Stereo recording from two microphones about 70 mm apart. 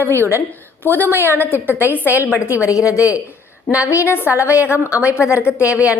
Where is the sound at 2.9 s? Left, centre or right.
Left.